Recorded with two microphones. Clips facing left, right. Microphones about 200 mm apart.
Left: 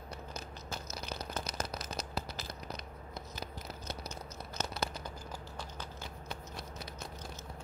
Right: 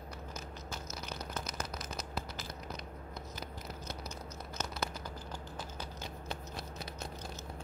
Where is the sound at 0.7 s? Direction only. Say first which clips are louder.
Left 3 dB; 35° left (ahead or behind).